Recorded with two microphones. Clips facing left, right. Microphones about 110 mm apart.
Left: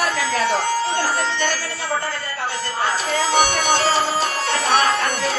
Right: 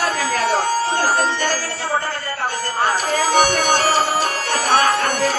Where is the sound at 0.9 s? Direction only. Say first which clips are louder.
Right 3 dB; 45° right (ahead or behind).